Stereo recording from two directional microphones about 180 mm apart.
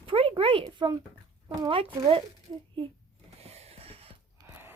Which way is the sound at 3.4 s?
35° right (ahead or behind).